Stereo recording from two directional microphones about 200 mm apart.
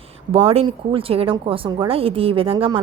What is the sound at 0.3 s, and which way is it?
Speech, 30° right (ahead or behind).